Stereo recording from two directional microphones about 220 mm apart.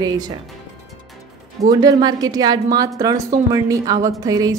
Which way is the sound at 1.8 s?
15° right (ahead or behind).